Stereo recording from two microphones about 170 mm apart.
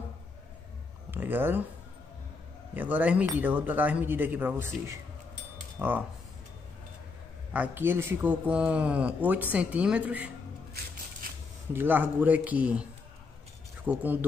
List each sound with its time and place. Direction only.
1.1 s speech: 10° right (ahead or behind)
2.7 s speech: 10° right (ahead or behind)
7.5 s speech: 10° right (ahead or behind)
11.2 s a sound: 55° right (ahead or behind)
11.7 s speech: 10° right (ahead or behind)
13.8 s speech: 10° right (ahead or behind)